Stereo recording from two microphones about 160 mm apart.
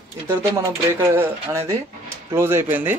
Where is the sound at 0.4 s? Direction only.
15° right (ahead or behind).